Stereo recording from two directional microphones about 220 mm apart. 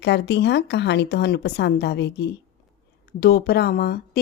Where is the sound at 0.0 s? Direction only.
50° left (ahead or behind).